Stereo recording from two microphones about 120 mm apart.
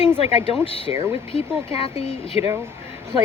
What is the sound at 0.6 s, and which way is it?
Speech, 55° left (ahead or behind).